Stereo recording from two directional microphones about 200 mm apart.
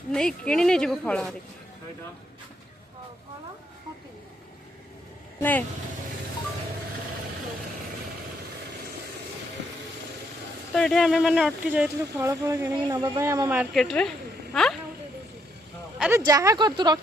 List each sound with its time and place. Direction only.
0.1 s speech: 5° left (ahead or behind)
5.4 s speech: 10° left (ahead or behind)
10.8 s speech: centre (ahead or behind)
16.0 s speech: 5° right (ahead or behind)